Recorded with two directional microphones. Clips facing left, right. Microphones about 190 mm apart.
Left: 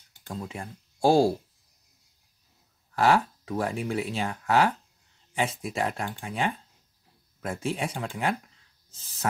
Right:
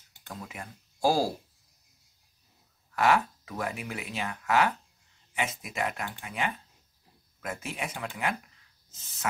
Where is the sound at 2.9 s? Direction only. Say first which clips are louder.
Left 2 dB; 30° left (ahead or behind).